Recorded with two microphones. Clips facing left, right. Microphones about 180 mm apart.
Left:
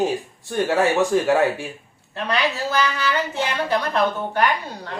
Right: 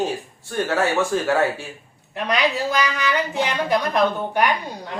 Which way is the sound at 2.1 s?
15° right (ahead or behind).